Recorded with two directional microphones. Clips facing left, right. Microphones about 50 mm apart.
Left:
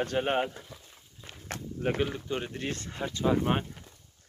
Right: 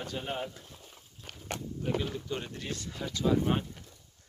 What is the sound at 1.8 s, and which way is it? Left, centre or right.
Speech, left.